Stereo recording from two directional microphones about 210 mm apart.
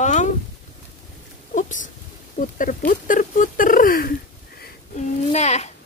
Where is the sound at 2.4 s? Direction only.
35° left (ahead or behind).